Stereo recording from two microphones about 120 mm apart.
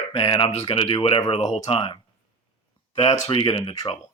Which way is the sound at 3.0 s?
50° left (ahead or behind).